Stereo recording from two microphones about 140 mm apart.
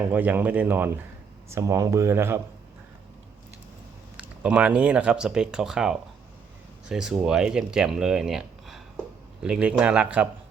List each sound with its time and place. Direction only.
0.0 s speech: 15° right (ahead or behind)
1.5 s speech: 25° right (ahead or behind)
4.2 s speech: 10° right (ahead or behind)